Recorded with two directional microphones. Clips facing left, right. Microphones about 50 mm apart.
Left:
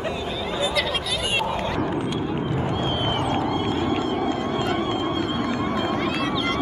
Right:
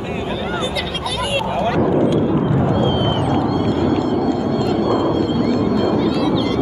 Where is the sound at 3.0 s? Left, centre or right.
Left.